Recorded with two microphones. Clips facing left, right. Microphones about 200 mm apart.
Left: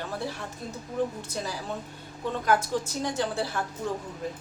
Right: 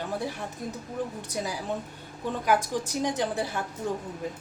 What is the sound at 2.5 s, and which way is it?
A woman's voice, 15° right (ahead or behind).